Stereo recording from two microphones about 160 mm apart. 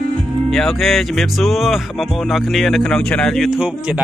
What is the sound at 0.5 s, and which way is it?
Speech, centre (ahead or behind).